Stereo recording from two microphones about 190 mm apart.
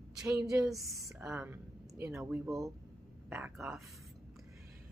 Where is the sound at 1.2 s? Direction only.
5° right (ahead or behind).